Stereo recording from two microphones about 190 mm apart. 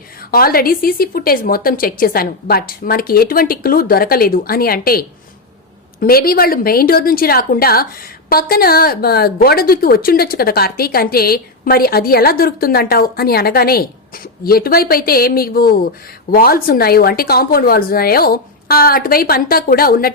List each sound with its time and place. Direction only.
0.3 s a woman's voice: 50° left (ahead or behind)